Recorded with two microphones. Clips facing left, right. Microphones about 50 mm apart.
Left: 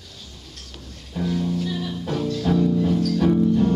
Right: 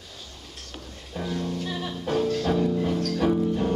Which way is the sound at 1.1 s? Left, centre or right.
Centre.